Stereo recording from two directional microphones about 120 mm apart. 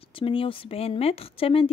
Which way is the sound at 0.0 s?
45° left (ahead or behind).